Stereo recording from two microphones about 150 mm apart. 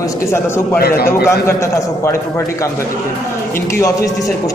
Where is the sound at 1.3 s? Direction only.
20° left (ahead or behind).